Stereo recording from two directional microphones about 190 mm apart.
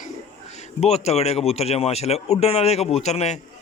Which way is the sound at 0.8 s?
35° left (ahead or behind).